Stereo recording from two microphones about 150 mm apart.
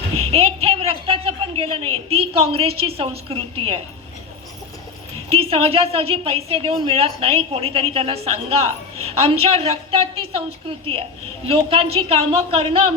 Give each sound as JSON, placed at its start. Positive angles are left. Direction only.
{"t": 0.3, "sound": "a woman's voice", "side_deg": -40}
{"t": 5.3, "sound": "a woman's voice", "side_deg": -40}
{"t": 11.4, "sound": "a woman's voice", "side_deg": -40}